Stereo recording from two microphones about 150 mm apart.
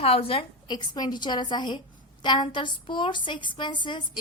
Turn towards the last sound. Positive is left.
turn(degrees=30)  # may be behind; listen again after turning